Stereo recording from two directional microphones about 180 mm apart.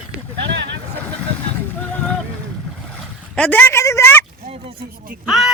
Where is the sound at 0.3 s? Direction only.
75° right (ahead or behind).